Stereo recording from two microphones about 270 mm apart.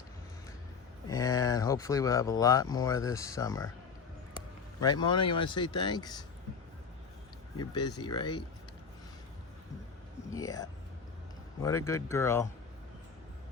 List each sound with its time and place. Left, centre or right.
1.0 s speech: centre
4.8 s speech: centre
7.6 s speech: centre
10.2 s a sound: centre
11.6 s speech: centre